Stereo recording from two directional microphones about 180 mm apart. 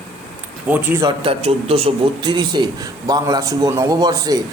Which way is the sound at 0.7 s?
10° right (ahead or behind).